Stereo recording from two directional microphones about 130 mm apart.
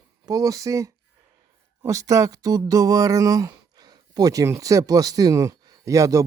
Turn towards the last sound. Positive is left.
turn(degrees=-25)  # may be behind; listen again after turning